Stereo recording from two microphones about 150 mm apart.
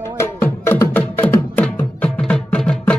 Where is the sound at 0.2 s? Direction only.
15° left (ahead or behind).